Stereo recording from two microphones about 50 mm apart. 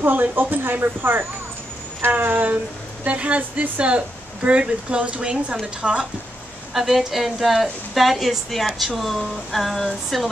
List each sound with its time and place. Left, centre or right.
0.0 s speech: right; by 6.0 s centre
6.7 s a woman's voice: centre